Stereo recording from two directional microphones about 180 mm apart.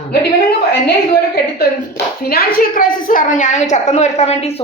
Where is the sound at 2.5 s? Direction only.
50° left (ahead or behind).